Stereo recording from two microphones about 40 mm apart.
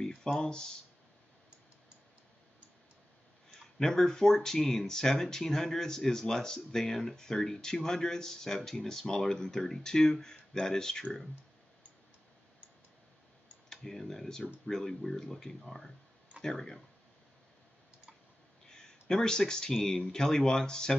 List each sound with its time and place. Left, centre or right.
0.0 s speech: centre
3.8 s speech: centre
13.7 s speech: centre
18.7 s a sound: centre
19.7 s speech: centre